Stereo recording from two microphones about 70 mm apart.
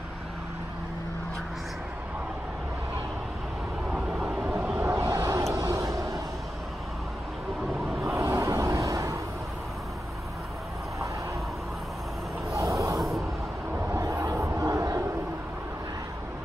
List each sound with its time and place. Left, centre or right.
3.9 s vehicle: centre
4.9 s vehicle: right
8.2 s vehicle: right
12.5 s a sound: right
14.1 s crowd: right